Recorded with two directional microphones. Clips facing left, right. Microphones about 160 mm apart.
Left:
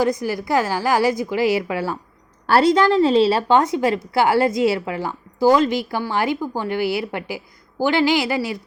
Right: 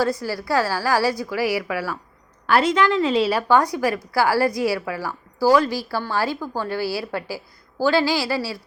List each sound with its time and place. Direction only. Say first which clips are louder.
0.0 s a woman's voice: left 3 dB; 20° left (ahead or behind)